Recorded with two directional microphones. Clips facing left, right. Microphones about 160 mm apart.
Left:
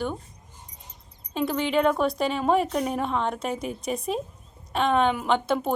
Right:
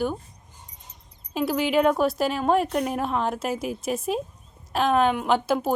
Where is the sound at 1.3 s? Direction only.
5° right (ahead or behind).